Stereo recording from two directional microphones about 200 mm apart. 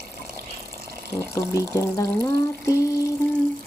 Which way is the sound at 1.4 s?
15° left (ahead or behind).